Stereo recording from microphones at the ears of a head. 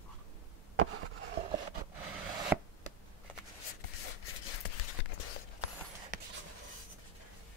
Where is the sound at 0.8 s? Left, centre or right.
Right.